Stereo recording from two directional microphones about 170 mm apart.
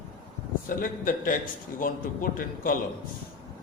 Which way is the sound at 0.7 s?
50° left (ahead or behind).